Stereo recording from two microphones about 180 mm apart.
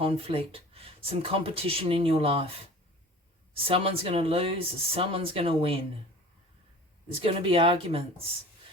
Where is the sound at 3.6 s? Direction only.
30° right (ahead or behind).